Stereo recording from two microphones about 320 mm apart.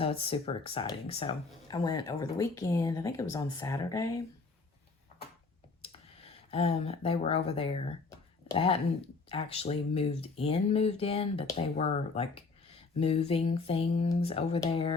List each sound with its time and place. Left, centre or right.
0.0 s speech: centre
5.8 s speech: centre